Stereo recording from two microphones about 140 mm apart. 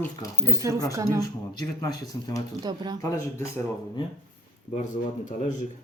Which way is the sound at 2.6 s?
30° right (ahead or behind).